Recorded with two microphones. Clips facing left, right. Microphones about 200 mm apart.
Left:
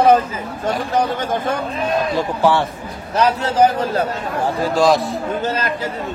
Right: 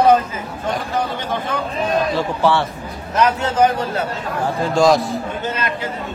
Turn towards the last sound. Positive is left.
turn(degrees=35)  # may be behind; listen again after turning